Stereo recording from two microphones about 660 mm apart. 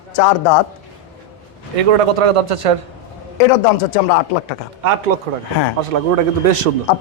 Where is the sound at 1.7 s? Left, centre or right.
Right.